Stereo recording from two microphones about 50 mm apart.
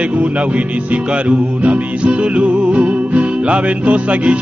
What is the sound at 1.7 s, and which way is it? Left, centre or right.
Music, centre.